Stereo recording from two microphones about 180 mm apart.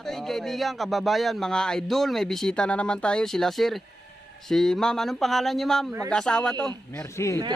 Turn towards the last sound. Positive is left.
turn(degrees=15)  # may be behind; listen again after turning